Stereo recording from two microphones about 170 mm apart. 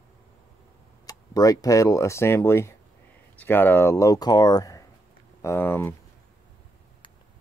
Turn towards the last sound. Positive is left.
turn(degrees=15)  # may be behind; listen again after turning